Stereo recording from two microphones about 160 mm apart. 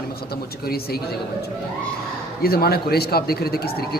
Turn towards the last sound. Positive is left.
turn(degrees=75)  # may be behind; listen again after turning